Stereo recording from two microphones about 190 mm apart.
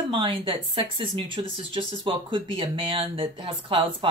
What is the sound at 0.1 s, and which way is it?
Speech, 30° right (ahead or behind).